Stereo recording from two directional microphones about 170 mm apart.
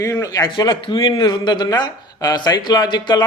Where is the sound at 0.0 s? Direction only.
20° left (ahead or behind).